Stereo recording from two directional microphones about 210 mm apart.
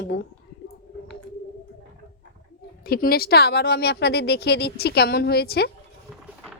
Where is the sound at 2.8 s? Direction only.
45° left (ahead or behind).